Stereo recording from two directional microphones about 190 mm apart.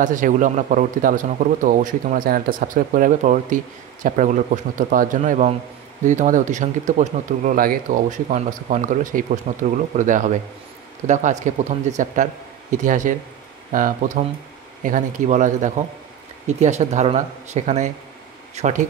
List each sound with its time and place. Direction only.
0.0 s speech: 45° right (ahead or behind)